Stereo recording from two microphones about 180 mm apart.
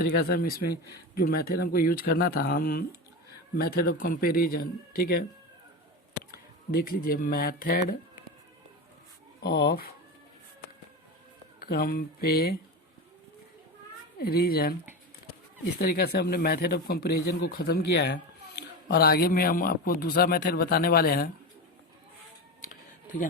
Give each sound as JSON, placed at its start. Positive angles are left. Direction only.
{"t": 0.0, "sound": "speech", "side_deg": 55}
{"t": 6.3, "sound": "speech", "side_deg": 55}
{"t": 9.4, "sound": "speech", "side_deg": 65}
{"t": 11.6, "sound": "speech", "side_deg": 60}
{"t": 14.2, "sound": "speech", "side_deg": 60}
{"t": 15.8, "sound": "speech", "side_deg": 60}